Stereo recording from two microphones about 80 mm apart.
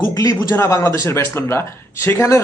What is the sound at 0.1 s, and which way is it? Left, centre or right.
Speech, left.